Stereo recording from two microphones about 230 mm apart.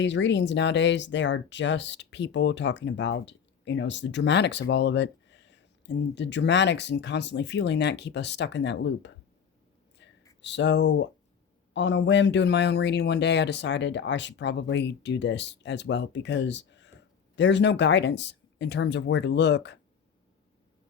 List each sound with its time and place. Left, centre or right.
0.0 s speech: left
10.0 s a sound: left
10.4 s speech: left